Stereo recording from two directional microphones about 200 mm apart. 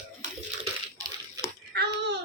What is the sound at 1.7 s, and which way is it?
Babbling, 55° right (ahead or behind).